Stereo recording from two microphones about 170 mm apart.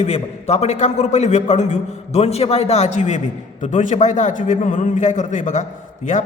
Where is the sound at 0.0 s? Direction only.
40° left (ahead or behind).